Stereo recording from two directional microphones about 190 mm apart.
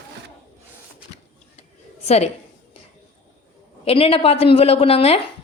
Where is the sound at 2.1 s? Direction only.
35° left (ahead or behind).